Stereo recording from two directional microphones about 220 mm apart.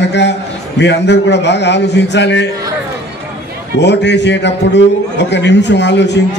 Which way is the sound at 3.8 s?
50° left (ahead or behind).